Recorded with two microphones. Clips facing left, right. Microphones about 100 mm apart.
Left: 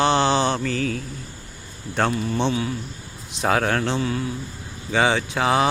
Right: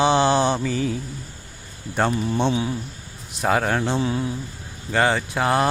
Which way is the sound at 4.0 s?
25° right (ahead or behind).